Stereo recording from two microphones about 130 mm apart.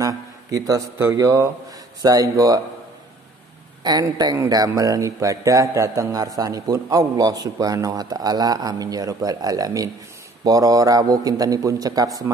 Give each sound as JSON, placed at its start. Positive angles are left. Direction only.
{"t": 0.0, "sound": "speech", "side_deg": -25}
{"t": 3.8, "sound": "speech", "side_deg": -30}